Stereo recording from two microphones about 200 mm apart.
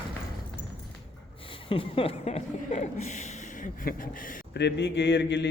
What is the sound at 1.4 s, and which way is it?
Chuckle, 25° left (ahead or behind).